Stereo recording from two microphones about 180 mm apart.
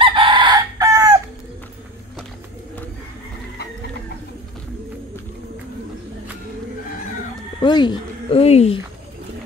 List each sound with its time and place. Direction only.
0.0 s chicken: 30° right (ahead or behind)
7.6 s speech: 25° left (ahead or behind)